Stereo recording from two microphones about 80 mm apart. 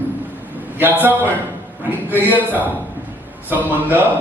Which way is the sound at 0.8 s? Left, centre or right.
Right.